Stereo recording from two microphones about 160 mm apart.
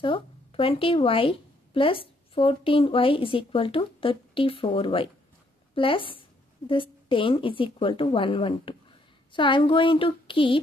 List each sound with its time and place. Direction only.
0.0 s a woman's voice: 35° left (ahead or behind)